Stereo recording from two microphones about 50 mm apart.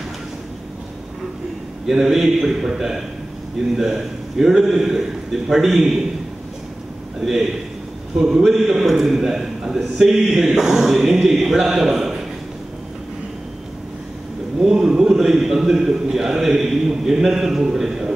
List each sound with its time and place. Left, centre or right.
1.9 s a man's voice: centre
7.2 s a man's voice: centre
14.6 s a sound: centre